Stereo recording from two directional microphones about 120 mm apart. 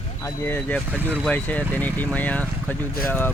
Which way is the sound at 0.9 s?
15° right (ahead or behind).